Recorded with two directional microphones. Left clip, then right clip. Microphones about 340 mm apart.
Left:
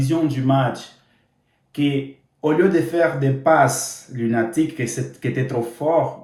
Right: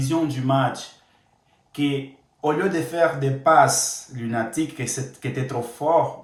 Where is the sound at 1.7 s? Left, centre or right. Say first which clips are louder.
Left 3 dB; centre.